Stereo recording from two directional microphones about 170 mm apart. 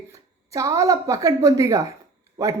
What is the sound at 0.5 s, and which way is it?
A woman's voice, 20° right (ahead or behind).